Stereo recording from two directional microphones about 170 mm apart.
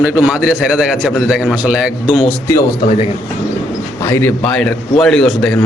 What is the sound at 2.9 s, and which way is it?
Speech, 35° left (ahead or behind).